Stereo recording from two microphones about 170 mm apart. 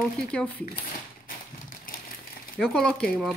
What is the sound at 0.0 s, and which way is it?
Speech, 5° left (ahead or behind).